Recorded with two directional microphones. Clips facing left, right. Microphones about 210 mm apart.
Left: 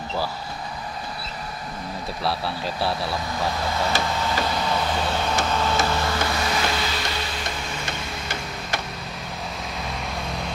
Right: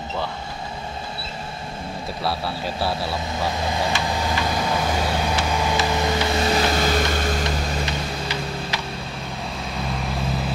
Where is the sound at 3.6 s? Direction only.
20° right (ahead or behind).